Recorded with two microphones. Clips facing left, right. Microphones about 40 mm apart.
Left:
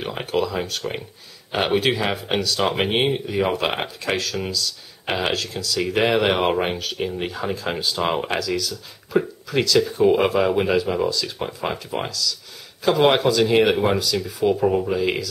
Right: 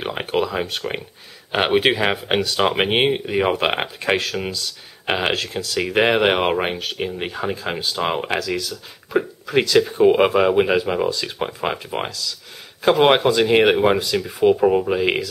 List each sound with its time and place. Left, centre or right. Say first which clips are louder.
0.0 s speech: right 2 dB; right; by 8.3 s centre
8.4 s speech: even; centre